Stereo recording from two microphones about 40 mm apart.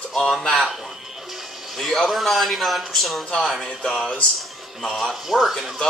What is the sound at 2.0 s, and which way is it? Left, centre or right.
Speech, centre.